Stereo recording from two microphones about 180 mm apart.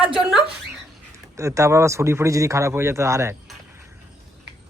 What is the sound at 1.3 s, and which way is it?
Speech, 15° right (ahead or behind).